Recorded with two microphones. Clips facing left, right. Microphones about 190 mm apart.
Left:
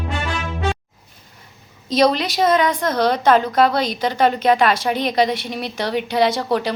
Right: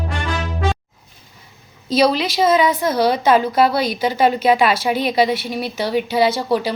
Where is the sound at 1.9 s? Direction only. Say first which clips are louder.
Right 1 dB; 5° right (ahead or behind).